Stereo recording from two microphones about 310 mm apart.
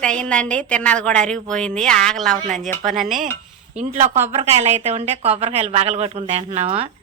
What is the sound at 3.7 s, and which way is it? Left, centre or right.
Speech, right.